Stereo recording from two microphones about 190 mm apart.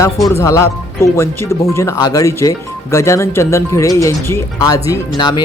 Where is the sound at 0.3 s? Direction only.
15° left (ahead or behind).